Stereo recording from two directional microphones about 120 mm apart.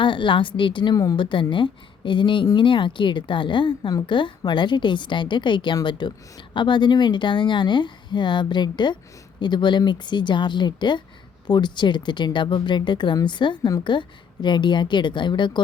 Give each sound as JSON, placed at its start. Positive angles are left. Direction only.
{"t": 0.0, "sound": "a woman's voice", "side_deg": 45}